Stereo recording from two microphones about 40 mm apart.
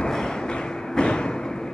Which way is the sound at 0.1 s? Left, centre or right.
Centre.